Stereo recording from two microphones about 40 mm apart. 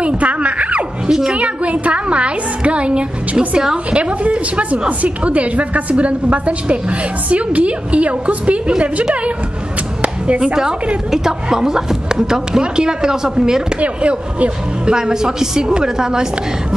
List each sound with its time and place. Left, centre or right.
0.0 s a sound: right
1.0 s a child's voice: centre
1.4 s a woman's voice: right
10.0 s chop: right
10.4 s a woman's voice: centre
13.7 s a woman's voice: right
14.9 s a woman's voice: centre